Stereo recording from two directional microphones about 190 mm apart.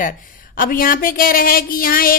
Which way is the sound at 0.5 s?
45° left (ahead or behind).